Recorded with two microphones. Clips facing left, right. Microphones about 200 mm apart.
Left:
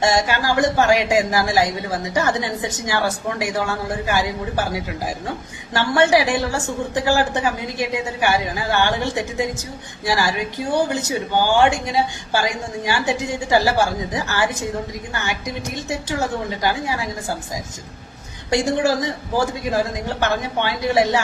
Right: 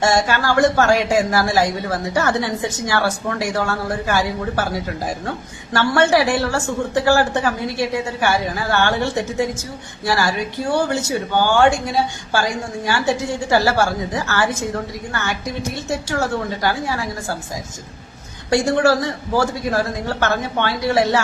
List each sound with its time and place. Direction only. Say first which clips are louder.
0.0 s a woman's voice: right 1 dB; 20° left (ahead or behind)
10.8 s a woman's voice: even; 15° left (ahead or behind)
18.5 s a woman's voice: right 3 dB; 20° left (ahead or behind)